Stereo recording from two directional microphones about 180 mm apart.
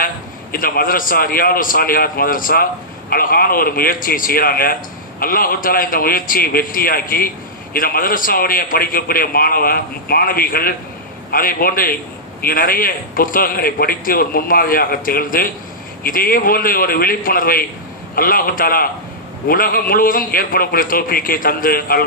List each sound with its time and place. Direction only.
0.5 s a man's voice: 55° left (ahead or behind)